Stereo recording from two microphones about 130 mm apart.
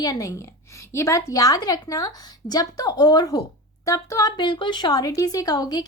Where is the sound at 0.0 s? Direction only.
30° left (ahead or behind).